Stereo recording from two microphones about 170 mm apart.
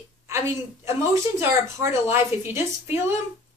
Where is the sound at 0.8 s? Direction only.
15° right (ahead or behind).